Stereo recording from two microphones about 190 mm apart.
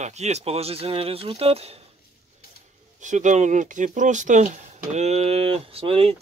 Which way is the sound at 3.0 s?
40° right (ahead or behind).